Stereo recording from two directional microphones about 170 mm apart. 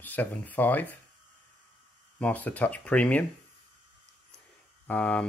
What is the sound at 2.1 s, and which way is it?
Speech, 10° left (ahead or behind).